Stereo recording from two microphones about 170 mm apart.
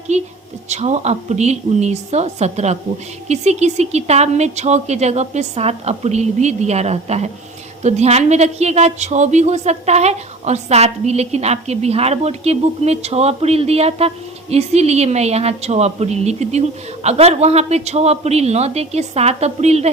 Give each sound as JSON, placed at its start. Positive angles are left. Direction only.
{"t": 0.1, "sound": "speech", "side_deg": -40}